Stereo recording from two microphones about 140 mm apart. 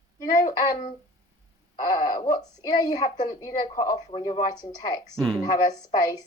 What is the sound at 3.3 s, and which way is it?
Speech, 30° left (ahead or behind).